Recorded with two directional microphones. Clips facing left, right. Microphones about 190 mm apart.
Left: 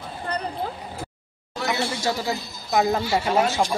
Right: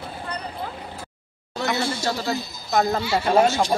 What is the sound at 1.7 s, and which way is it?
A man's voice, 10° left (ahead or behind).